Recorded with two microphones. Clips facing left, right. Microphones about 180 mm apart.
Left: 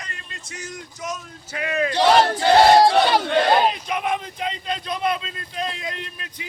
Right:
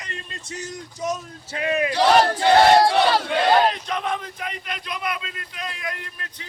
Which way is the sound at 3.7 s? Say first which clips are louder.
Left 2 dB; 10° left (ahead or behind).